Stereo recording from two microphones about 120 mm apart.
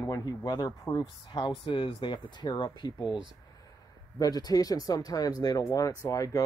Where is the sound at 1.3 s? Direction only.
45° left (ahead or behind).